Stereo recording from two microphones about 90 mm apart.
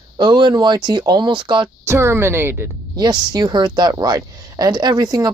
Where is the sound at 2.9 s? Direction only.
55° right (ahead or behind).